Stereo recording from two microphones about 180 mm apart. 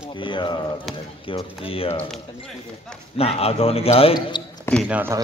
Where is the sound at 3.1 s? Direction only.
35° left (ahead or behind).